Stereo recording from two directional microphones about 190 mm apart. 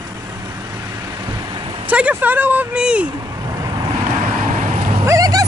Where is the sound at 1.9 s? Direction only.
5° right (ahead or behind).